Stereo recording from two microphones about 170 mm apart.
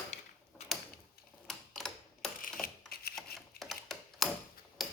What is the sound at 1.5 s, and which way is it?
Tick-tock, centre (ahead or behind).